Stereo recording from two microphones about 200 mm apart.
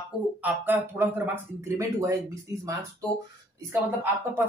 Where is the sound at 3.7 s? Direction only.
10° right (ahead or behind).